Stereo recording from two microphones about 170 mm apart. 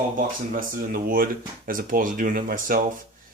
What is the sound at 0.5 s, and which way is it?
Speech, 55° right (ahead or behind).